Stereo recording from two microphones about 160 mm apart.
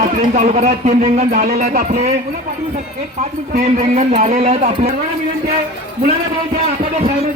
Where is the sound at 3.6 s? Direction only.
45° right (ahead or behind).